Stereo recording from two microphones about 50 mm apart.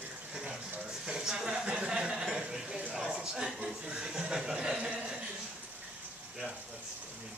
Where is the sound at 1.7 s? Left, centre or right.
Centre.